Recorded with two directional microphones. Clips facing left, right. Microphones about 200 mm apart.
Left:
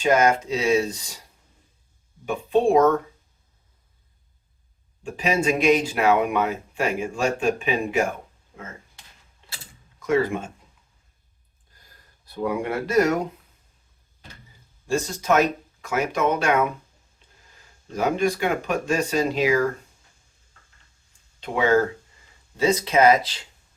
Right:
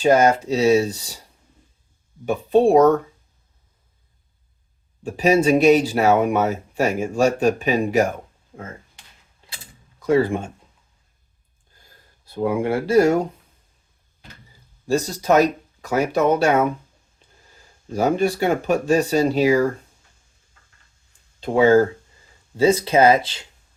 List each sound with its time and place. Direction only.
0.0 s speech: 35° right (ahead or behind)
2.2 s speech: 35° right (ahead or behind)
5.0 s speech: 35° right (ahead or behind)
10.0 s speech: 30° right (ahead or behind)
12.2 s speech: 25° right (ahead or behind)
14.8 s speech: 35° right (ahead or behind)
17.9 s speech: 35° right (ahead or behind)
21.4 s speech: 35° right (ahead or behind)